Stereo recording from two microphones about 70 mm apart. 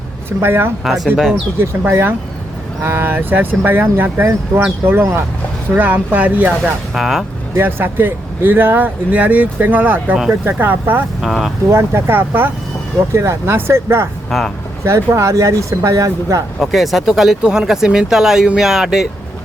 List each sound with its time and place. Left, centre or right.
0.3 s speech: right
0.9 s speech: centre
1.9 s speech: right
6.9 s speech: centre
7.5 s speech: right
11.2 s speech: centre
11.7 s speech: right
14.3 s speech: centre
14.8 s speech: right
16.6 s speech: centre